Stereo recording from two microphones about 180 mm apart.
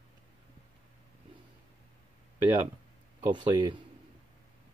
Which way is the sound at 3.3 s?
25° right (ahead or behind).